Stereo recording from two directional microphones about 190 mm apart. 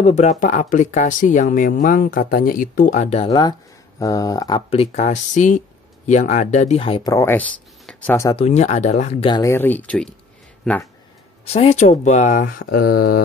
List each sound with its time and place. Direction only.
0.0 s speech: 35° left (ahead or behind)
3.3 s speech: 20° left (ahead or behind)
7.8 s a sound: 5° left (ahead or behind)
8.4 s speech: 35° left (ahead or behind)
9.4 s speech: 15° left (ahead or behind)
11.4 s speech: 30° left (ahead or behind); by 13.2 s 55° left (ahead or behind)